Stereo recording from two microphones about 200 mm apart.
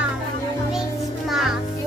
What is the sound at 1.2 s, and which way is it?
Music, centre (ahead or behind).